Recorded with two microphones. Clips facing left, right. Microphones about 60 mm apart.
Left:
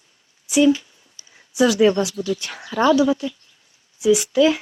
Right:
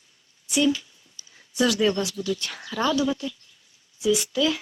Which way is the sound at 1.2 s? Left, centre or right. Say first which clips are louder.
Even; left.